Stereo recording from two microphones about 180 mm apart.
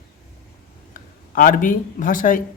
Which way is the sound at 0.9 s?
50° left (ahead or behind).